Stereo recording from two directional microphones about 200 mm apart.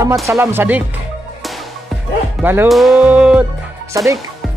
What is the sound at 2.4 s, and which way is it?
Speech, 10° right (ahead or behind).